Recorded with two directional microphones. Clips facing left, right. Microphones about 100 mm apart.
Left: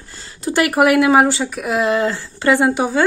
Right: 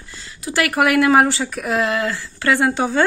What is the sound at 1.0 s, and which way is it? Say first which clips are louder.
Speech: left 1 dB; 5° left (ahead or behind).